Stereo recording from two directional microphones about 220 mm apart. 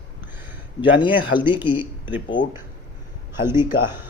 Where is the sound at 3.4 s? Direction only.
10° right (ahead or behind).